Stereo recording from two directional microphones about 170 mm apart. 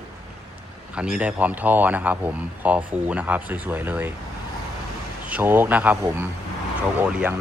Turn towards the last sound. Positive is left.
turn(degrees=-5)  # may be behind; listen again after turning